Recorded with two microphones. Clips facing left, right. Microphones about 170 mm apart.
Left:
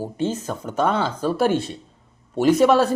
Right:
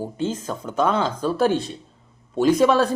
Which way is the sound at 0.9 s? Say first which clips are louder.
Even; 10° left (ahead or behind).